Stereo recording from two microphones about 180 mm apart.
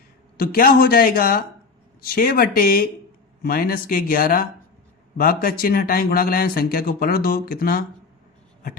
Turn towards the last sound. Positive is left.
turn(degrees=55)  # may be behind; listen again after turning